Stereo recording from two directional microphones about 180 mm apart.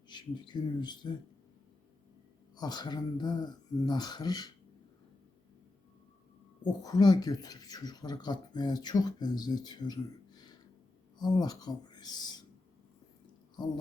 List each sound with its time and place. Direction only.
0.1 s speech: 25° left (ahead or behind)
2.6 s speech: 25° left (ahead or behind)
6.8 s speech: 20° left (ahead or behind)